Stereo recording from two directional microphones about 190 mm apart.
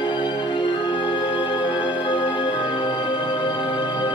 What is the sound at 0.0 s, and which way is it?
Music, 25° left (ahead or behind).